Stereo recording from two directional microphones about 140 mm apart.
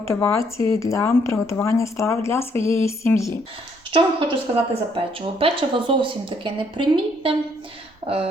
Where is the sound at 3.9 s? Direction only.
35° right (ahead or behind).